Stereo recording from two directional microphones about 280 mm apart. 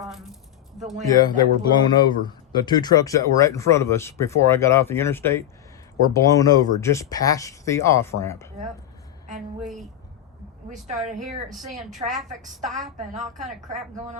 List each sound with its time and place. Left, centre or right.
0.0 s speech: centre
1.2 s speech: centre
9.2 s a sound: right
9.6 s speech: centre
11.1 s a woman's voice: right
11.5 s speech: centre
12.0 s a woman's voice: right